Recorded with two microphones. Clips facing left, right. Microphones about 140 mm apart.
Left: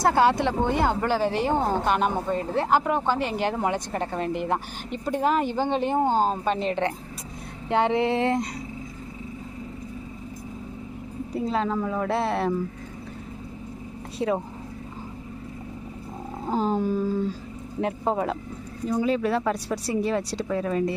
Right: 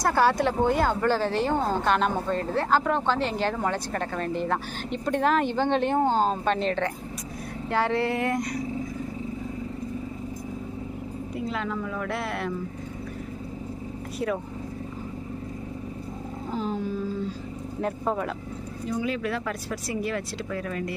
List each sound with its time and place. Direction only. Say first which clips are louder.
0.0 s speech: left 2 dB; 20° left (ahead or behind)
7.7 s female singing: left 3 dB; 20° left (ahead or behind)
11.3 s speech: left 5 dB; 35° left (ahead or behind)
14.2 s female singing: left 3 dB; 25° left (ahead or behind)
16.5 s a sound: left 6 dB; 40° left (ahead or behind)
18.0 s female singing: left 4 dB; 30° left (ahead or behind)
18.9 s speech: left 5 dB; 35° left (ahead or behind)